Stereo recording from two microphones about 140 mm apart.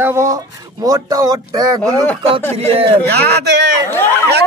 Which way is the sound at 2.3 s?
45° right (ahead or behind).